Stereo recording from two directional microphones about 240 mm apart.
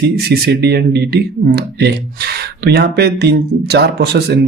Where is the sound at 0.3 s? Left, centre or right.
Right.